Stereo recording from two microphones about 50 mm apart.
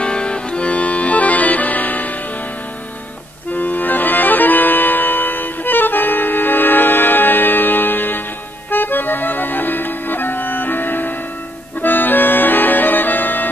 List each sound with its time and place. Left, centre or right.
0.0 s music: centre; by 2.0 s left
3.5 s music: left
8.6 s accordion: left